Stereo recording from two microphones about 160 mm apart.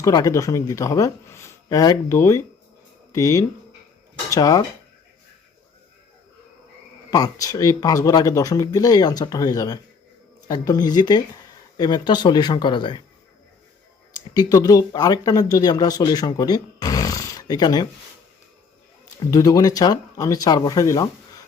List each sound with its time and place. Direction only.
0.0 s speech: 20° left (ahead or behind)
7.1 s speech: 20° left (ahead or behind)
14.1 s speech: 25° left (ahead or behind)
19.2 s speech: 20° left (ahead or behind)